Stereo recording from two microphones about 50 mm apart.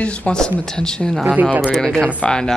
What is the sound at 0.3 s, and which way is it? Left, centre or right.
Speech, centre.